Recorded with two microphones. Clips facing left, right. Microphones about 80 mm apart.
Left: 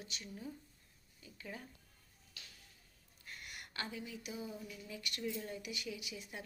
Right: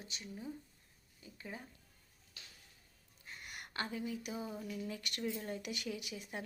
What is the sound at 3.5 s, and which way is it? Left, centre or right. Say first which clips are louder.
A woman's voice: right 4 dB; right.